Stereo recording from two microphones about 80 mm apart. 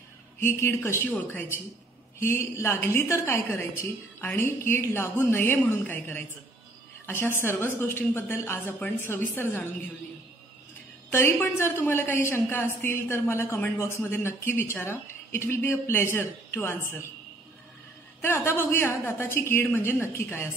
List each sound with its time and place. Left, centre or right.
0.4 s a woman's voice: left
1.1 s a woman's voice: left
11.1 s a woman's voice: left
18.2 s a woman's voice: left